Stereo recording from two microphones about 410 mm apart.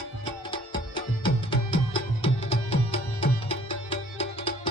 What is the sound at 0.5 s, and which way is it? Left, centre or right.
Music, centre.